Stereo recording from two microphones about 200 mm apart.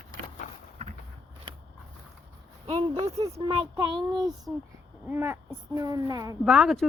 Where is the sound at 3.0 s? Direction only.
30° right (ahead or behind).